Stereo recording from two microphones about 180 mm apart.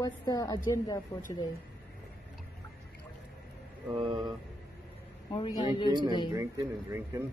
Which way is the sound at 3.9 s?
25° right (ahead or behind).